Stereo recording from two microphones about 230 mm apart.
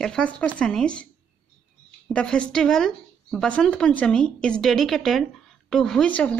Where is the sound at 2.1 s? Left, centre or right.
Centre.